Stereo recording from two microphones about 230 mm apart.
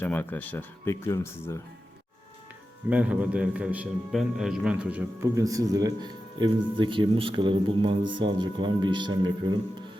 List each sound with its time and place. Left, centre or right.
0.0 s speech: centre
2.9 s a man's voice: centre